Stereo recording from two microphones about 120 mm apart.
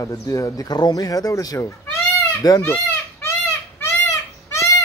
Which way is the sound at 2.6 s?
20° left (ahead or behind).